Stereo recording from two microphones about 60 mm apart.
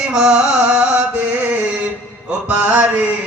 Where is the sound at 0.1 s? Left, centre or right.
Centre.